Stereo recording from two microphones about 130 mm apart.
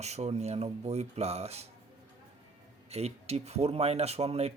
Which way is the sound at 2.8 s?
55° right (ahead or behind).